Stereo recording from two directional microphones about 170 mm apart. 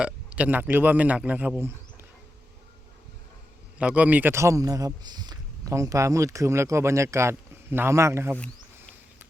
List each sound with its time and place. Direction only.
0.0 s speech: 5° right (ahead or behind)
3.8 s speech: 5° right (ahead or behind)